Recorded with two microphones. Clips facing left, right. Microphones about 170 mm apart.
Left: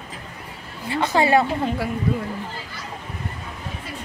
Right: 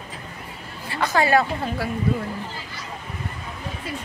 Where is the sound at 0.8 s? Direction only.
25° left (ahead or behind).